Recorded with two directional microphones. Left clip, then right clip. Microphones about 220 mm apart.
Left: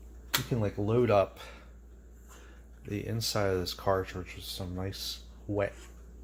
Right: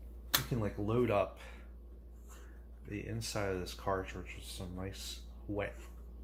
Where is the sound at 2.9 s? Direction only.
50° left (ahead or behind).